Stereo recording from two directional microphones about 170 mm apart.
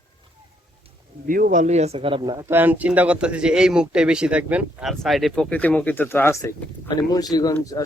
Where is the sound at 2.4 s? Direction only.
10° right (ahead or behind); by 7.5 s 20° left (ahead or behind).